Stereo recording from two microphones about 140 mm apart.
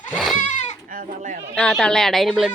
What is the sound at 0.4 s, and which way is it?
Goat, 60° left (ahead or behind).